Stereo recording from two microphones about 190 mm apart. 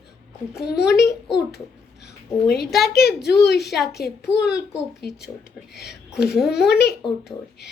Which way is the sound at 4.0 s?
55° left (ahead or behind).